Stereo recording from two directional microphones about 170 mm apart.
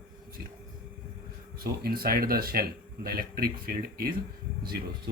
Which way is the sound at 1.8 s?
60° right (ahead or behind).